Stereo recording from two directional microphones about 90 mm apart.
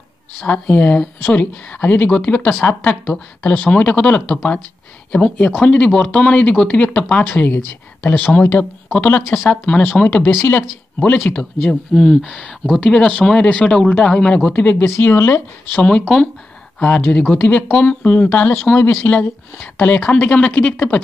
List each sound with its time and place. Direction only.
0.5 s a woman's voice: 15° left (ahead or behind)
9.5 s a woman's voice: 15° left (ahead or behind)
11.0 s a woman's voice: 15° left (ahead or behind)
15.7 s a woman's voice: 10° left (ahead or behind)